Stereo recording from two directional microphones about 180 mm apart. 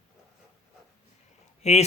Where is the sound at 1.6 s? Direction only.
35° left (ahead or behind).